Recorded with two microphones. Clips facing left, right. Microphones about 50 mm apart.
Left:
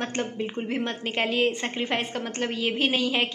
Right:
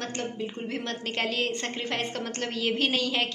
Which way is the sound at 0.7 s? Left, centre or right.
Centre.